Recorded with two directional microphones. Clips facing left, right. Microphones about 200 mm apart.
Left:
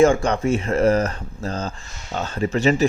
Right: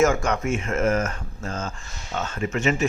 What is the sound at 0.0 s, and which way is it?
Speech, 30° left (ahead or behind).